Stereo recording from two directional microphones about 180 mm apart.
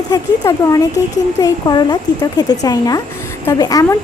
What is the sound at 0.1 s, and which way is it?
A woman's voice, 20° left (ahead or behind).